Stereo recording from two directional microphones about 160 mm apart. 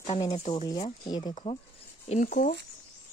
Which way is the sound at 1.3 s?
40° left (ahead or behind).